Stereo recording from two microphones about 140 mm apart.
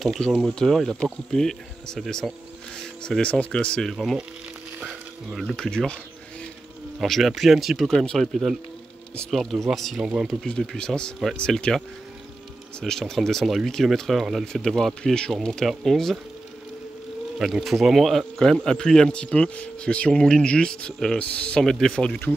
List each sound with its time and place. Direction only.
0.0 s speech: centre (ahead or behind)
3.9 s speech: 5° right (ahead or behind)
7.0 s speech: centre (ahead or behind)
12.8 s speech: 5° left (ahead or behind)
17.4 s speech: centre (ahead or behind)